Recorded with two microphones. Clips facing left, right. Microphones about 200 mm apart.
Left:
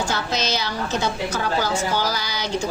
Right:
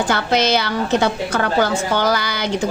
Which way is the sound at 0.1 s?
60° right (ahead or behind).